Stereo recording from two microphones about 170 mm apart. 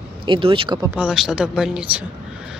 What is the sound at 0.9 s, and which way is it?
Speech, 5° right (ahead or behind).